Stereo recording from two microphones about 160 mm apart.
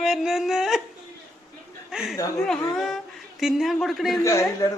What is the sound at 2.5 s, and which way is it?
Speech, 5° left (ahead or behind).